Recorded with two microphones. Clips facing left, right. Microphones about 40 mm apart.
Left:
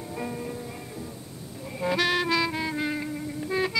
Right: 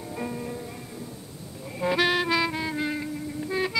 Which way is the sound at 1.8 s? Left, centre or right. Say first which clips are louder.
Right 1 dB; centre.